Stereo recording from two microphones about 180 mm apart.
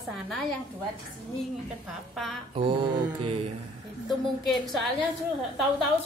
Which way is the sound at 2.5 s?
30° right (ahead or behind).